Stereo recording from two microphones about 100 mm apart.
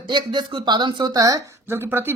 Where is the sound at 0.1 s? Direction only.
50° right (ahead or behind).